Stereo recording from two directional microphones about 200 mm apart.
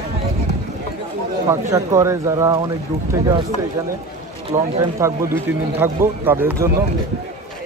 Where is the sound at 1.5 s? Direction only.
15° right (ahead or behind).